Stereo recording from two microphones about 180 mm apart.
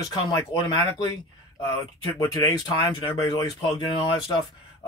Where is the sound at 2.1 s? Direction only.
20° left (ahead or behind).